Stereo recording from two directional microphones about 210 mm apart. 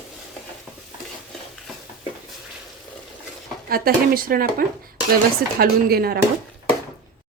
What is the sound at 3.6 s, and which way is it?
Speech, 45° right (ahead or behind).